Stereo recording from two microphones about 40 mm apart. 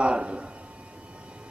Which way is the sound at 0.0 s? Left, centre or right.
Right.